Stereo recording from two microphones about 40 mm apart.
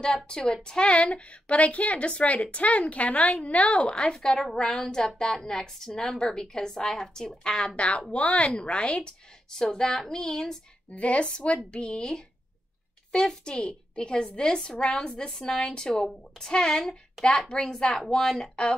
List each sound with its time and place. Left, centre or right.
0.0 s a woman's voice: centre
4.1 s a woman's voice: centre
9.5 s a woman's voice: centre
10.9 s a woman's voice: left; by 18.5 s centre